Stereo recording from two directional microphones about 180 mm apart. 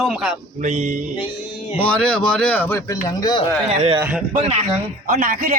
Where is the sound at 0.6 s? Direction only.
40° right (ahead or behind).